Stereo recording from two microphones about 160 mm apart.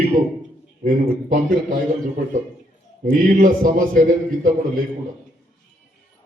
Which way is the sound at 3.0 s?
60° right (ahead or behind).